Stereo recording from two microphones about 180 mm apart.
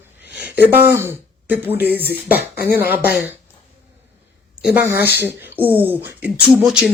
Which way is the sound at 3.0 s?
60° left (ahead or behind).